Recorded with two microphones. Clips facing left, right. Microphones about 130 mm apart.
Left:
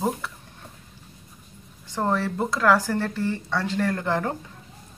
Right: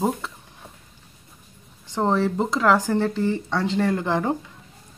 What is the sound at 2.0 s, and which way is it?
Speech, 20° right (ahead or behind).